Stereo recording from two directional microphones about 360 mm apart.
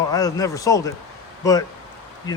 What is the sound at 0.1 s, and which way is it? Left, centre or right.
Speech, centre.